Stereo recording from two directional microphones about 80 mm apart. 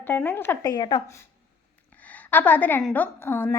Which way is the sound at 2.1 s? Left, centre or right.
Left.